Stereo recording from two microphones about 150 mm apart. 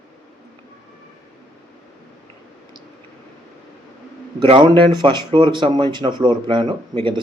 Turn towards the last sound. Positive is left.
turn(degrees=-30)  # may be behind; listen again after turning